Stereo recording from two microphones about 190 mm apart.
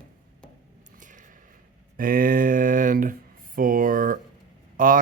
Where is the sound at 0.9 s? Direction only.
40° right (ahead or behind).